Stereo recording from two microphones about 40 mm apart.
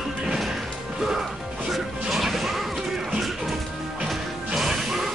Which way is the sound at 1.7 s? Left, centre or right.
Centre.